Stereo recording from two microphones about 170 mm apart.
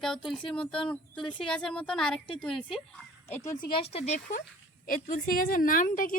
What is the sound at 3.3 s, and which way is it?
Speech, 15° left (ahead or behind).